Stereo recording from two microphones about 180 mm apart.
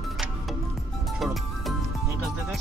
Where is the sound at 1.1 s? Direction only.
Centre (ahead or behind).